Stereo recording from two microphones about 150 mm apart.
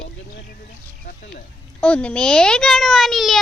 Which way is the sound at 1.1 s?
65° left (ahead or behind).